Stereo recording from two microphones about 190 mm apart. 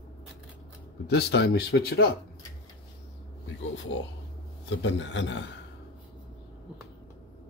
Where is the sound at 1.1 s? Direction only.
60° left (ahead or behind).